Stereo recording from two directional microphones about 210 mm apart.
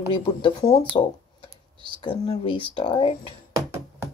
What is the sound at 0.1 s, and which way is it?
Speech, 25° left (ahead or behind).